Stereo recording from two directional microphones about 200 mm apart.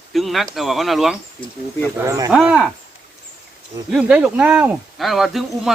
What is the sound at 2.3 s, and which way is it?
Speech, 5° right (ahead or behind).